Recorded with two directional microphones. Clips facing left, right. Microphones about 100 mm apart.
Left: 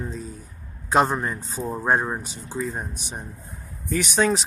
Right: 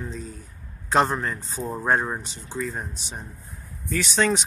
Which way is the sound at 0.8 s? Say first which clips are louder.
Left 1 dB; 15° left (ahead or behind).